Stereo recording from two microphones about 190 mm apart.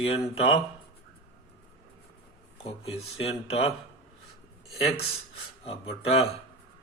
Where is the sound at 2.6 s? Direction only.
30° left (ahead or behind).